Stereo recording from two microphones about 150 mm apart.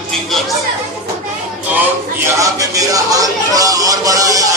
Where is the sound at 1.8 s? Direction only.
20° right (ahead or behind).